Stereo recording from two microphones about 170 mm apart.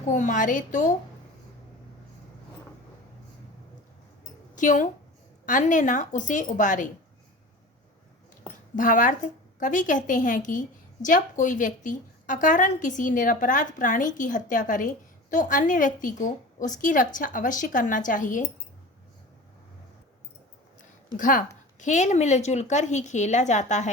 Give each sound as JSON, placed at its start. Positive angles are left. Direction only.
{"t": 0.1, "sound": "a woman's voice", "side_deg": 50}
{"t": 4.5, "sound": "a woman's voice", "side_deg": 50}
{"t": 8.7, "sound": "a woman's voice", "side_deg": 50}
{"t": 21.2, "sound": "a woman's voice", "side_deg": 50}